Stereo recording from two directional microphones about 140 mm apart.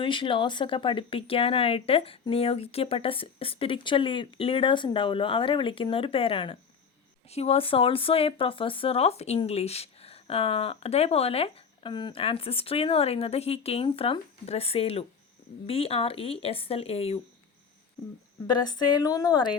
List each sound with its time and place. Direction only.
0.0 s speech: 35° left (ahead or behind)
18.4 s speech: 30° left (ahead or behind)